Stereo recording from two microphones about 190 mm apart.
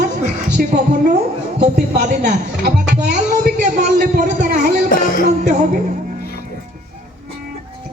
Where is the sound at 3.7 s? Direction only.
40° right (ahead or behind).